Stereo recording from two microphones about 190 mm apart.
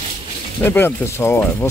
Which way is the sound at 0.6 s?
10° left (ahead or behind).